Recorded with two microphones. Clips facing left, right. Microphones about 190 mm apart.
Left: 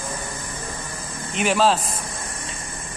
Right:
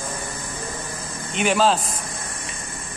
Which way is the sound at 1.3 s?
Centre (ahead or behind).